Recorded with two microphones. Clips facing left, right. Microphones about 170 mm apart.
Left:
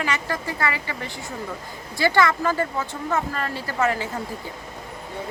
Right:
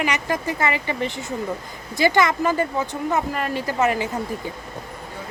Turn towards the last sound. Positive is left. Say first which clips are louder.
# right 3 dB
turn(degrees=-20)  # may be behind; listen again after turning